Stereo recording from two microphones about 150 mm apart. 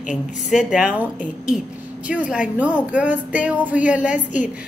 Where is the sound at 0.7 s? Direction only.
5° right (ahead or behind).